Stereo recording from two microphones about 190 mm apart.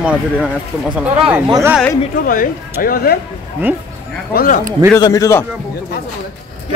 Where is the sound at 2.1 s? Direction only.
45° left (ahead or behind).